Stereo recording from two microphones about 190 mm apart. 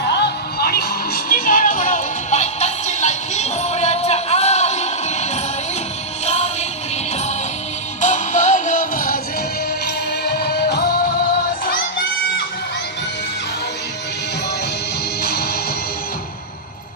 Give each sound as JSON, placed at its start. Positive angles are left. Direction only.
{"t": 0.1, "sound": "music", "side_deg": 55}
{"t": 8.0, "sound": "music", "side_deg": 40}
{"t": 15.2, "sound": "music", "side_deg": 55}